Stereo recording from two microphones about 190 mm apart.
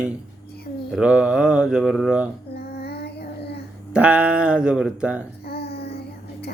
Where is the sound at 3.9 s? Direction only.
5° right (ahead or behind).